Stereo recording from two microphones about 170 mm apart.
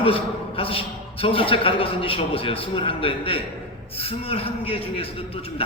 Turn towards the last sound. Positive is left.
turn(degrees=35)  # may be behind; listen again after turning